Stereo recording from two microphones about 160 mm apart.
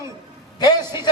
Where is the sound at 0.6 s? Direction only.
25° left (ahead or behind).